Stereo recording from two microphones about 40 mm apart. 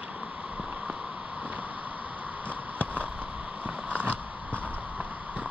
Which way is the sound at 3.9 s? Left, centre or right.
Right.